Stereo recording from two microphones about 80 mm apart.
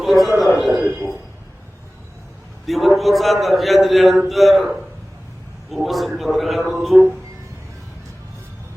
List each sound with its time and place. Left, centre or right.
0.0 s a man's voice: centre
0.8 s a man's voice: right
2.6 s a man's voice: centre